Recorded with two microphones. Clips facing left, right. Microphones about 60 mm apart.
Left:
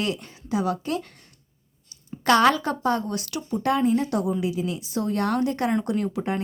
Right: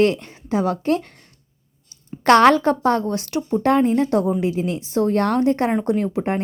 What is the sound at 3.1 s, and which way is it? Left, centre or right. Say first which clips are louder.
Speech: right 7 dB; right.